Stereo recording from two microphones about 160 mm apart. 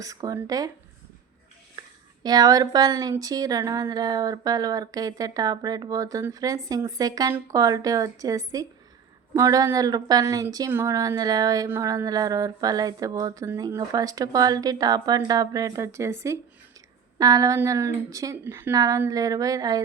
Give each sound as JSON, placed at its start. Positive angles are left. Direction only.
{"t": 0.0, "sound": "speech", "side_deg": -20}
{"t": 2.2, "sound": "speech", "side_deg": -25}